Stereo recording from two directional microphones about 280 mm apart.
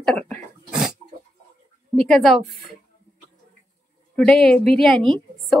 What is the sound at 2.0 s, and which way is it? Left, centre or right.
Speech, centre.